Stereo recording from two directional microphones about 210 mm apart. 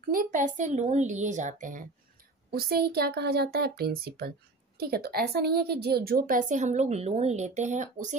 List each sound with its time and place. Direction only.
0.1 s a woman's voice: 40° right (ahead or behind)